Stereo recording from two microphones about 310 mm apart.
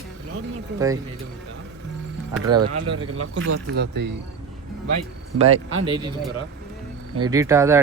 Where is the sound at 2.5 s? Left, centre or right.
Right.